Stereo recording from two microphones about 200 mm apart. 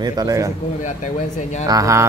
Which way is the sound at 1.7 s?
15° right (ahead or behind).